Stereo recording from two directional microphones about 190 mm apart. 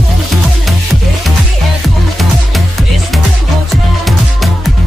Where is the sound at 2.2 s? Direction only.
Centre (ahead or behind).